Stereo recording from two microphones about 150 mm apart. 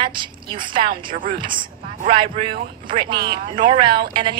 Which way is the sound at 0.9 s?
70° right (ahead or behind).